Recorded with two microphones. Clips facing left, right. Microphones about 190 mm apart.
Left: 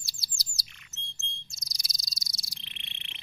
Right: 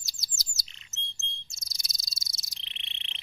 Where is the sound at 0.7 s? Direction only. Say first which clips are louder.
Right 2 dB; 25° right (ahead or behind).